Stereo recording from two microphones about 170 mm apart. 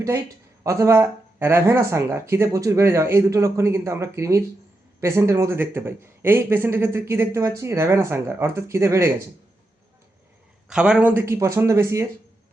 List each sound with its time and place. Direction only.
0.6 s a man's voice: 20° right (ahead or behind)
10.7 s a man's voice: 5° right (ahead or behind)